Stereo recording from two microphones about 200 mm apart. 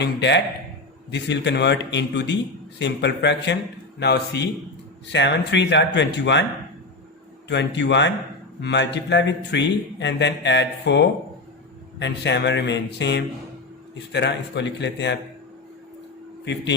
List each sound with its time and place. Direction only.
0.0 s a man's voice: 60° left (ahead or behind)
7.4 s a man's voice: 60° left (ahead or behind)
16.4 s a man's voice: 60° left (ahead or behind)